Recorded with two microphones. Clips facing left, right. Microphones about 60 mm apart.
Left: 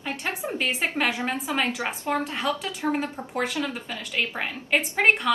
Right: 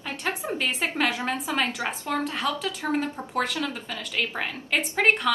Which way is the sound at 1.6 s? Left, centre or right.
Centre.